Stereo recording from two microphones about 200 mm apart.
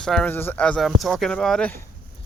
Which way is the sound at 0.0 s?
5° left (ahead or behind).